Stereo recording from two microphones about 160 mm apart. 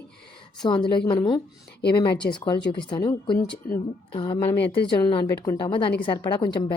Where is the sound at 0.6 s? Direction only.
30° left (ahead or behind).